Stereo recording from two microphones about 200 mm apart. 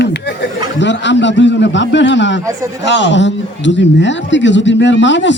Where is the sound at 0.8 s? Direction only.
65° left (ahead or behind).